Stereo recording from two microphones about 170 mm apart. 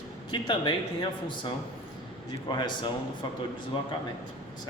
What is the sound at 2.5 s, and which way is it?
Speech, 25° left (ahead or behind).